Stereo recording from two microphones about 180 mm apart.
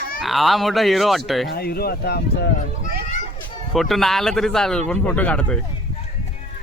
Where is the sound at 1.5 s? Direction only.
60° left (ahead or behind).